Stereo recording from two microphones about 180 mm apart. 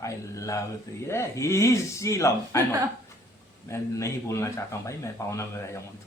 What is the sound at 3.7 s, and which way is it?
Speech, 15° left (ahead or behind).